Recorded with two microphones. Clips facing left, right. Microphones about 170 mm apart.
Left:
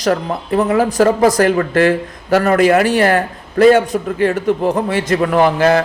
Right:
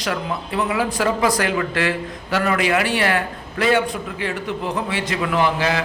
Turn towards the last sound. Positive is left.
turn(degrees=50)  # may be behind; listen again after turning